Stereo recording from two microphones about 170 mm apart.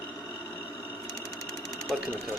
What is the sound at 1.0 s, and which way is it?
Sewing machine, 20° left (ahead or behind).